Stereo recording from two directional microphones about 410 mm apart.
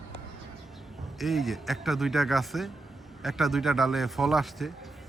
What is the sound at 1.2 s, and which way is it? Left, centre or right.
Speech, centre.